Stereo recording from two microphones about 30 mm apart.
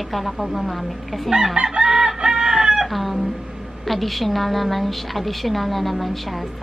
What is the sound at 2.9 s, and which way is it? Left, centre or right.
A woman's voice, centre.